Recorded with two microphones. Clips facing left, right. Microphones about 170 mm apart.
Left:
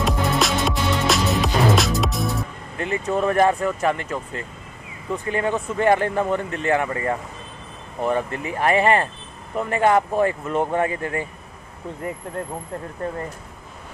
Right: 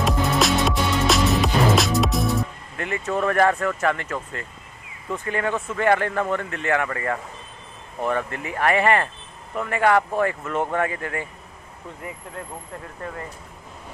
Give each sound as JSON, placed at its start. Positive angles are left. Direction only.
{"t": 0.0, "sound": "music", "side_deg": 0}
{"t": 2.8, "sound": "speech", "side_deg": 20}